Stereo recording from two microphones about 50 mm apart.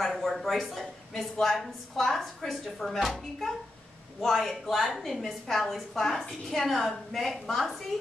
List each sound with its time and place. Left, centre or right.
0.0 s a woman's voice: centre